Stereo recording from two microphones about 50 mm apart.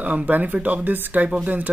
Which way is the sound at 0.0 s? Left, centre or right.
Right.